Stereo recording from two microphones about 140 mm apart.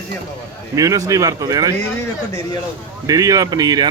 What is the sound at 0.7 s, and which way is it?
Speech, 25° right (ahead or behind).